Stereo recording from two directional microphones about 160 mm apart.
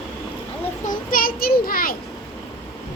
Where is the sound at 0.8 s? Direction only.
60° left (ahead or behind).